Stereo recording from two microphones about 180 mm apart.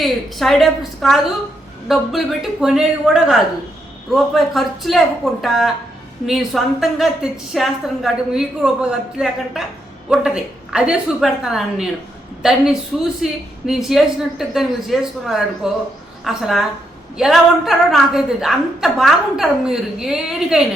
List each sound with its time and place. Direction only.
0.0 s a woman's voice: centre (ahead or behind)